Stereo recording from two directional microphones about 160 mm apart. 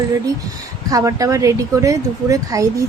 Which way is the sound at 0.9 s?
20° right (ahead or behind).